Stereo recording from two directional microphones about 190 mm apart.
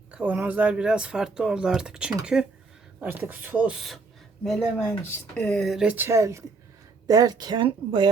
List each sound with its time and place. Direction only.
0.1 s speech: 5° right (ahead or behind); by 8.1 s 25° right (ahead or behind)